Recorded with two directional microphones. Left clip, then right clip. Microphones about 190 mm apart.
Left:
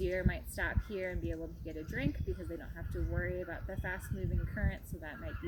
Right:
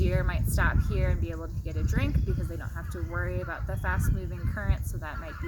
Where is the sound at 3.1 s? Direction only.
45° right (ahead or behind).